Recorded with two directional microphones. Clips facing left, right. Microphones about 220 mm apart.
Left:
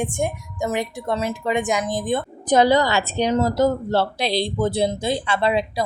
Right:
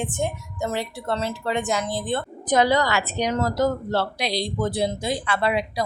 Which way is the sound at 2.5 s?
30° left (ahead or behind).